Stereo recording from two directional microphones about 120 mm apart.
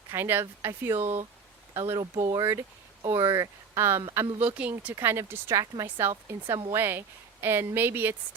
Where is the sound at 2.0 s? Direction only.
30° right (ahead or behind).